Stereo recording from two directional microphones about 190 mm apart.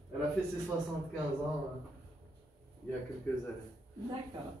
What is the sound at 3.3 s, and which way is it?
Speech, 10° left (ahead or behind).